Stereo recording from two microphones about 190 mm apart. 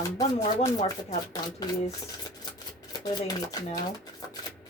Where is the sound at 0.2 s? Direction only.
20° left (ahead or behind).